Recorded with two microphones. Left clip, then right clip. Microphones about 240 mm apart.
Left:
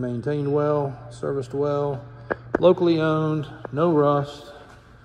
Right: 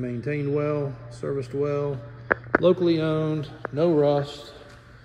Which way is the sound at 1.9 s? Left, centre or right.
Left.